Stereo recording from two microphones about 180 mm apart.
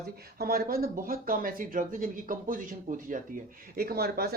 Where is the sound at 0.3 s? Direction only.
60° right (ahead or behind).